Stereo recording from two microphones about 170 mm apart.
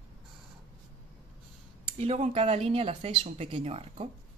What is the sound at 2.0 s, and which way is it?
Speech, 35° right (ahead or behind).